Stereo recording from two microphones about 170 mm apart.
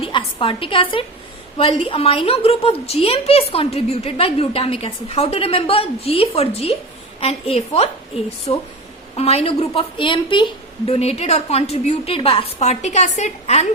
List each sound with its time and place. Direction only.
0.0 s a woman's voice: 30° left (ahead or behind)